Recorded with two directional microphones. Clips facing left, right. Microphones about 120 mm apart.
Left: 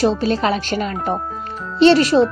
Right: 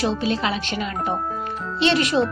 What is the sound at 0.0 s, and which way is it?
A woman's voice, 40° left (ahead or behind).